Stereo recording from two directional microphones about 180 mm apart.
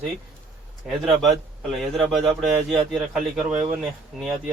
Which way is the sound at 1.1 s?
Centre (ahead or behind).